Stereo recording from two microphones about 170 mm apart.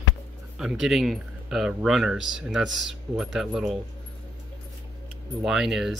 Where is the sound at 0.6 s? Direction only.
Centre (ahead or behind).